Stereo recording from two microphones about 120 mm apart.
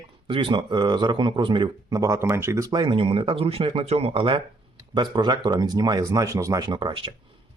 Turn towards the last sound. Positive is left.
turn(degrees=-45)  # may be behind; listen again after turning